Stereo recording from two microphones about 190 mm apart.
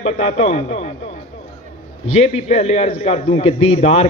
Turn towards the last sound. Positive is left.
turn(degrees=35)  # may be behind; listen again after turning